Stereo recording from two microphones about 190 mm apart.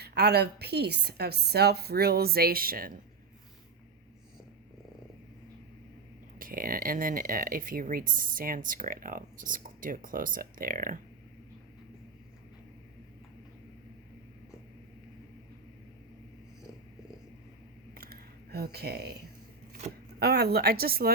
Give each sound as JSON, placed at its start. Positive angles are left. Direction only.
{"t": 0.0, "sound": "a woman's voice", "side_deg": -60}
{"t": 6.4, "sound": "speech", "side_deg": -50}
{"t": 17.9, "sound": "a sound", "side_deg": -55}
{"t": 20.1, "sound": "a woman's voice", "side_deg": -55}